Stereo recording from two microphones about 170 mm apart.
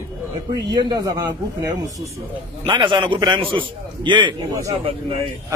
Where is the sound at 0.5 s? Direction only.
25° right (ahead or behind).